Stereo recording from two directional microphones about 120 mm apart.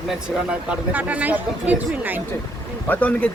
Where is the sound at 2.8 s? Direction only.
15° left (ahead or behind).